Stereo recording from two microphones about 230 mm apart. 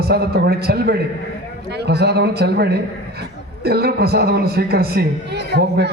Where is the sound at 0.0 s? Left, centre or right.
Right.